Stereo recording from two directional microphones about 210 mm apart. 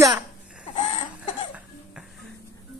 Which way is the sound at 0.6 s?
30° left (ahead or behind).